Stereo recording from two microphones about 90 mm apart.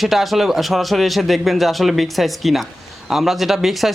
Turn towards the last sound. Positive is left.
turn(degrees=0)  # may be behind; listen again after turning